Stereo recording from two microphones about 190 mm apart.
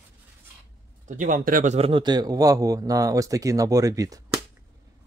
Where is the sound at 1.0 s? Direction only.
45° right (ahead or behind).